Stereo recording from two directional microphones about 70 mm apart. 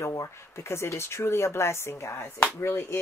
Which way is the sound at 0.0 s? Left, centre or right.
Left.